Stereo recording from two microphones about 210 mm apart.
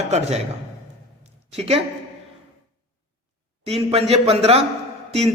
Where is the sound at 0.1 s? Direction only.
30° right (ahead or behind).